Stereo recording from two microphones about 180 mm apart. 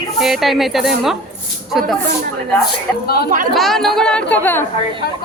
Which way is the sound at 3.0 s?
60° left (ahead or behind).